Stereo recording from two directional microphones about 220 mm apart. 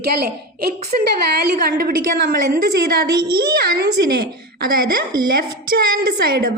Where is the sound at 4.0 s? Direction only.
50° right (ahead or behind).